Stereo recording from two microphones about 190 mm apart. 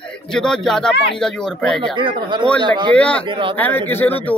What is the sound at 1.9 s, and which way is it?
A man's voice, 25° right (ahead or behind).